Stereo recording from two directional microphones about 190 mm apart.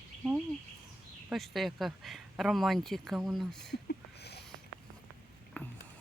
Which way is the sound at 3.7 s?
60° left (ahead or behind).